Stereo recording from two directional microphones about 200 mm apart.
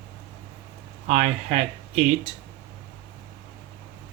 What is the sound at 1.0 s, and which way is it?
Speech, 35° right (ahead or behind).